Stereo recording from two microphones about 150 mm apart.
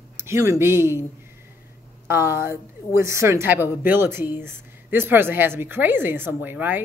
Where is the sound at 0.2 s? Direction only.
20° right (ahead or behind).